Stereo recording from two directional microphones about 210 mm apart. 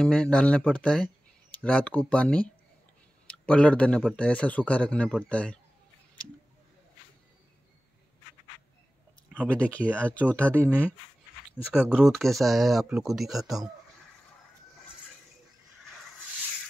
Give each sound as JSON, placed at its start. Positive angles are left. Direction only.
{"t": 0.0, "sound": "speech", "side_deg": 5}
{"t": 9.5, "sound": "speech", "side_deg": 5}
{"t": 10.5, "sound": "speech", "side_deg": -10}